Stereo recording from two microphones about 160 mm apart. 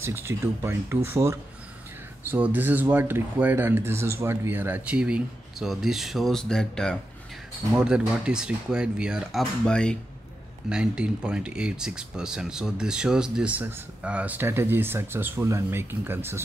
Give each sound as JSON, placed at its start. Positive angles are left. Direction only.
{"t": 0.0, "sound": "speech", "side_deg": -15}
{"t": 7.7, "sound": "speech", "side_deg": -5}
{"t": 10.7, "sound": "speech", "side_deg": -5}